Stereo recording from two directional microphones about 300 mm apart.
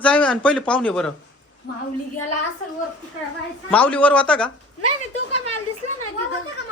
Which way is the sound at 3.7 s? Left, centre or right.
Centre.